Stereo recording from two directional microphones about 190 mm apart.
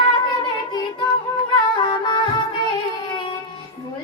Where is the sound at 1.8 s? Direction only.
25° left (ahead or behind).